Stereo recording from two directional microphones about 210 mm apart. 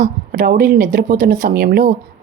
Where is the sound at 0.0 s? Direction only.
40° right (ahead or behind).